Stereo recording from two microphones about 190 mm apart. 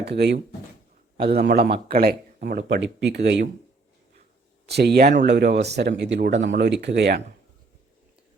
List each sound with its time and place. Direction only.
0.0 s speech: 60° right (ahead or behind)
4.7 s speech: 60° right (ahead or behind)